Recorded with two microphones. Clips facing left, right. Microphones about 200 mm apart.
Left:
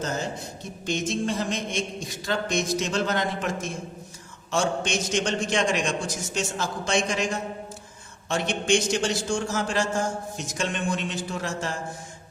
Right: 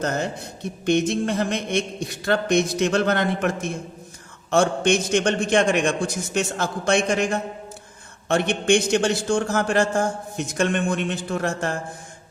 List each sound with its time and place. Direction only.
0.0 s a man's voice: 60° right (ahead or behind)